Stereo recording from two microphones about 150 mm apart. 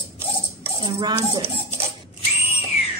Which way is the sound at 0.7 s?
30° right (ahead or behind).